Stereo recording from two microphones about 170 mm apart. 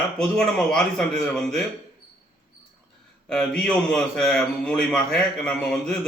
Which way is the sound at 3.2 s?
5° left (ahead or behind).